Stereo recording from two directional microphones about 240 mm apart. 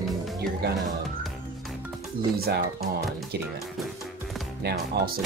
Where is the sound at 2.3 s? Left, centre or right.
Right.